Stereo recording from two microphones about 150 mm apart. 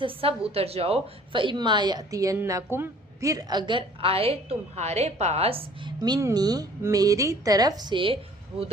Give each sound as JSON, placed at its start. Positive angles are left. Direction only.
{"t": 0.0, "sound": "a woman's voice", "side_deg": -40}
{"t": 6.0, "sound": "a woman's voice", "side_deg": -25}